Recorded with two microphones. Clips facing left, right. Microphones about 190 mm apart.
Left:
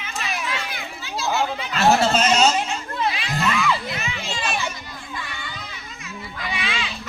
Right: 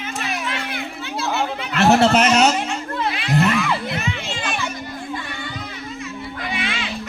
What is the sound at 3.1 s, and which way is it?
Music, 55° right (ahead or behind).